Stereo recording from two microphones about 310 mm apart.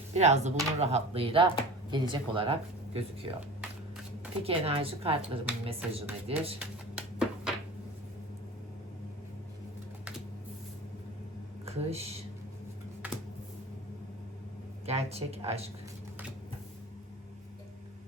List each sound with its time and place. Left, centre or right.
0.1 s speech: right
4.4 s speech: centre
6.6 s a sound: centre
11.6 s speech: centre
13.0 s computer keyboard: centre
14.8 s speech: centre